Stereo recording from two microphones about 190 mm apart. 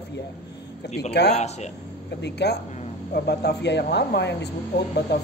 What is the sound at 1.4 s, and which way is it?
Speech, 35° left (ahead or behind).